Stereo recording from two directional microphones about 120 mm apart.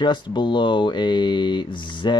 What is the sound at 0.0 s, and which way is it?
Speech, 40° left (ahead or behind).